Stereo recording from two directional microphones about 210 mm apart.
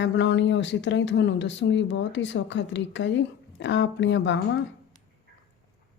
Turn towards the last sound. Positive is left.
turn(degrees=60)  # may be behind; listen again after turning